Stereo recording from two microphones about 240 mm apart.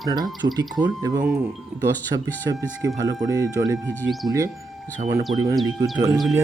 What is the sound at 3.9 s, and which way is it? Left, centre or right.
Speech, centre.